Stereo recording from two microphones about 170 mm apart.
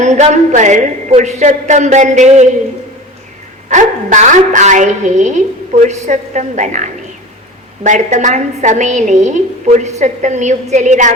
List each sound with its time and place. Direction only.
0.0 s a woman's voice: 45° right (ahead or behind)
3.7 s a woman's voice: 45° right (ahead or behind)